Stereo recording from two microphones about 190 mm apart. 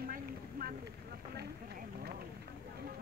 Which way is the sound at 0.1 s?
50° right (ahead or behind).